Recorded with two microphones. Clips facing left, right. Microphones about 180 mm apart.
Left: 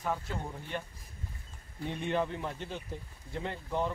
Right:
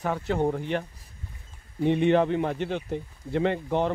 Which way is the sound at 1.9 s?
75° right (ahead or behind).